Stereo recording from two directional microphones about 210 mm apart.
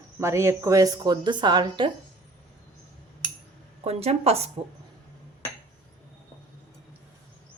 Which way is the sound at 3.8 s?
30° right (ahead or behind).